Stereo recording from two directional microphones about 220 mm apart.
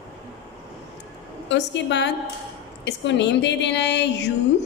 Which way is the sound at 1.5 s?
55° left (ahead or behind).